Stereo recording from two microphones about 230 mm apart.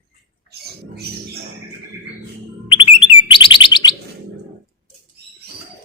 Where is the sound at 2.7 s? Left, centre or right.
Left.